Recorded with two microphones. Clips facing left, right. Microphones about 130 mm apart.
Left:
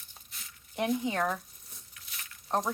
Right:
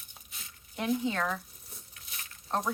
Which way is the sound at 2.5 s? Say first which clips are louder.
Left 2 dB; 15° left (ahead or behind).